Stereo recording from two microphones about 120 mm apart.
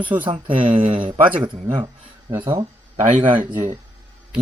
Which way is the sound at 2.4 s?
35° right (ahead or behind).